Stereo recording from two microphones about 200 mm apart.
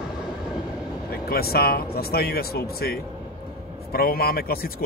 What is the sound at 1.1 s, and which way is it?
A man's voice, 50° left (ahead or behind).